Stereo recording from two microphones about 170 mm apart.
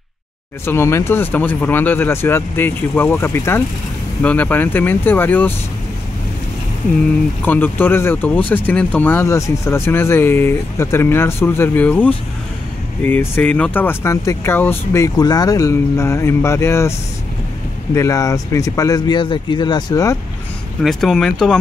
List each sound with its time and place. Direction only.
0.7 s speech: 15° left (ahead or behind)
7.4 s speech: 10° left (ahead or behind)
17.9 s speech: 20° left (ahead or behind)
20.8 s speech: centre (ahead or behind)